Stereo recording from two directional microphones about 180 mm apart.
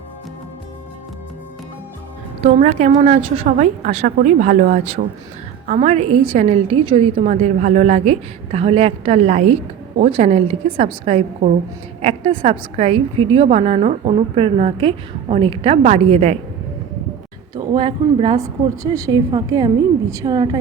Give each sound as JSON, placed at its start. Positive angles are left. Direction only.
{"t": 2.5, "sound": "a woman's voice", "side_deg": -45}
{"t": 17.5, "sound": "a woman's voice", "side_deg": -20}